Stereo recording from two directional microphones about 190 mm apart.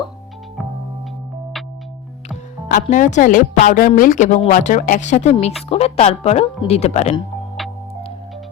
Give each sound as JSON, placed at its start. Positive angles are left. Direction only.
{"t": 0.6, "sound": "music", "side_deg": 0}
{"t": 2.6, "sound": "a woman's voice", "side_deg": 45}